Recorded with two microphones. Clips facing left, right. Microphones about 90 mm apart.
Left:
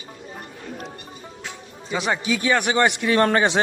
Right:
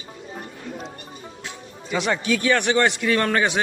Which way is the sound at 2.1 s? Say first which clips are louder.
Even; 10° left (ahead or behind).